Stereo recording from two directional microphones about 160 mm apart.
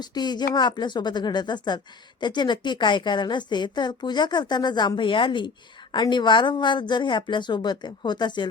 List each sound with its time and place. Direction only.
0.0 s a woman's voice: 25° left (ahead or behind)